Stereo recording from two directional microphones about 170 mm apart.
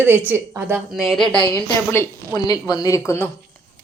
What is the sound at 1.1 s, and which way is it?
Speech, centre (ahead or behind).